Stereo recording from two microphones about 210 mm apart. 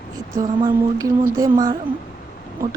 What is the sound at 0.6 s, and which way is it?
Speech, 15° right (ahead or behind).